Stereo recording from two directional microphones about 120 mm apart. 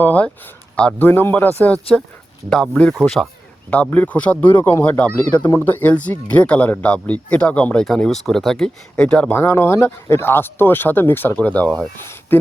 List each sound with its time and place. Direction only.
0.0 s speech: 15° left (ahead or behind)
9.4 s speech: 20° left (ahead or behind)